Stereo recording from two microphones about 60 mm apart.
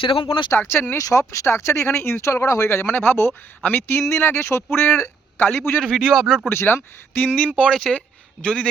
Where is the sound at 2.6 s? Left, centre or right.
Left.